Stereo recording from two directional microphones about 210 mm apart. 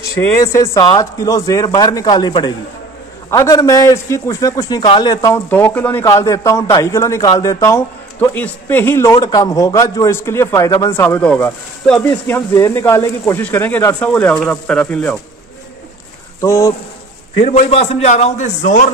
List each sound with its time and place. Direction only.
0.4 s a man's voice: 15° left (ahead or behind)
16.3 s speech: 15° left (ahead or behind)
17.4 s a man's voice: 30° left (ahead or behind)